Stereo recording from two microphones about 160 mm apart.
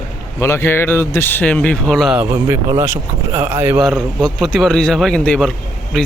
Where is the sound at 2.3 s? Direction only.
20° right (ahead or behind).